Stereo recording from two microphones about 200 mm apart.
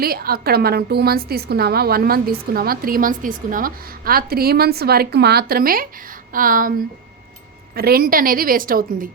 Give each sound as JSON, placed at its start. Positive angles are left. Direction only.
{"t": 0.0, "sound": "a woman's voice", "side_deg": -50}
{"t": 7.8, "sound": "a woman's voice", "side_deg": -50}